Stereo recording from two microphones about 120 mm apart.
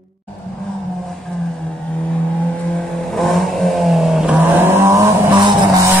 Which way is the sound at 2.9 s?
Centre (ahead or behind).